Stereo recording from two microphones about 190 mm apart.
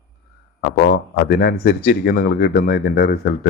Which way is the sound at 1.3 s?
55° left (ahead or behind).